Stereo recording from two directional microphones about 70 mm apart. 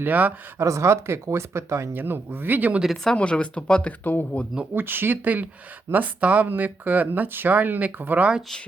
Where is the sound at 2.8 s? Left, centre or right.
Centre; by 4.5 s left.